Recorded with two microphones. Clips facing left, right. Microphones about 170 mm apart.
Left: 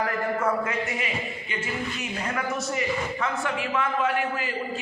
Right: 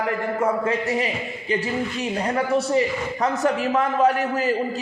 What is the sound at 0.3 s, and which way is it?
Speech, 35° right (ahead or behind).